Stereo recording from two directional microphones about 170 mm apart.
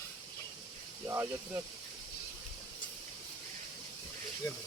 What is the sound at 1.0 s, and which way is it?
Speech, 15° right (ahead or behind).